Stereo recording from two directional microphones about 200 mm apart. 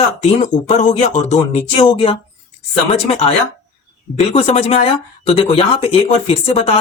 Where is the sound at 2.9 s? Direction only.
30° left (ahead or behind).